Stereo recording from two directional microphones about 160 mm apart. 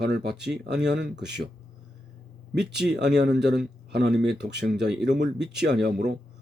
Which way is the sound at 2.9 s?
90° right.